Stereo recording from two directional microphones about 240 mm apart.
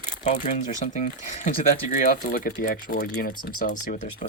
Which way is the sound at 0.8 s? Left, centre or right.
Left.